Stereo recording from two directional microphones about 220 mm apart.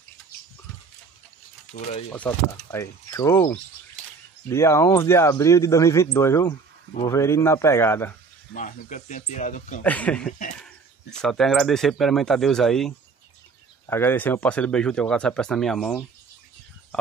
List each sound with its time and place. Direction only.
2.1 s speech: 5° left (ahead or behind)
8.5 s speech: 35° left (ahead or behind)
9.8 s speech: 5° left (ahead or behind)